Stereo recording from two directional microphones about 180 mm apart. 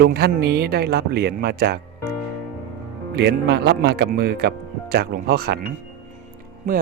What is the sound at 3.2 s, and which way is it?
Speech, 65° right (ahead or behind).